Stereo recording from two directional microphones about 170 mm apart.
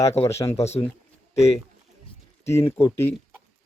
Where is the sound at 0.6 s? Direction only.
40° left (ahead or behind).